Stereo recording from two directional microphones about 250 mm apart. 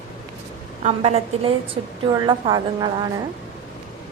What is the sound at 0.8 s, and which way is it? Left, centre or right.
A woman's voice, right.